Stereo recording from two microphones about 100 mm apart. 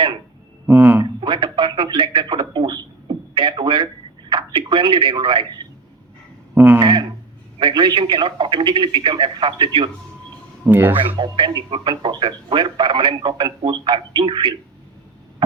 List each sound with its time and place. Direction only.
0.7 s speech: 20° right (ahead or behind)
1.2 s speech: 55° right (ahead or behind)
6.8 s speech: 50° right (ahead or behind)
10.7 s speech: 20° right (ahead or behind)
10.9 s speech: 60° right (ahead or behind)